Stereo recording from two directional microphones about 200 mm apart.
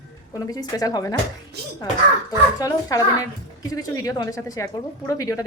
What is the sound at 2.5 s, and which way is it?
A woman's voice, 20° left (ahead or behind).